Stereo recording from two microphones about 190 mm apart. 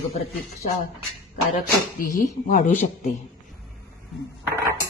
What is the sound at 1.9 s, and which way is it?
Speech, 45° left (ahead or behind).